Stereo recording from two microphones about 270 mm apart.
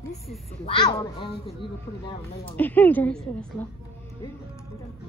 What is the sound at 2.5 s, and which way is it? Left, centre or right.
A woman's voice, centre.